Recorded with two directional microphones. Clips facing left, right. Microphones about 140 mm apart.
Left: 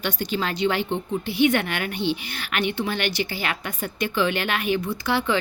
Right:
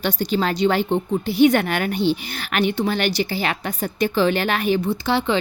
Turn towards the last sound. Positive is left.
turn(degrees=-25)  # may be behind; listen again after turning